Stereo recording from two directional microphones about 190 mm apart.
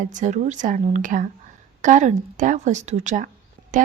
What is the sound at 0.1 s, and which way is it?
Speech, 40° right (ahead or behind).